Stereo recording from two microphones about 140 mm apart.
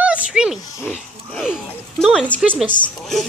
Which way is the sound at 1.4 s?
5° right (ahead or behind).